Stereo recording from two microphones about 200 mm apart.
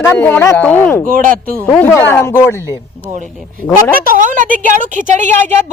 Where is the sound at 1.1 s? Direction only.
45° right (ahead or behind).